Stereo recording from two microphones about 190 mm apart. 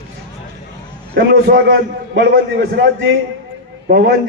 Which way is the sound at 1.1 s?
60° right (ahead or behind).